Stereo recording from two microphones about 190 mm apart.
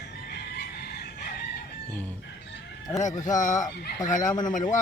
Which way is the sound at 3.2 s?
20° left (ahead or behind).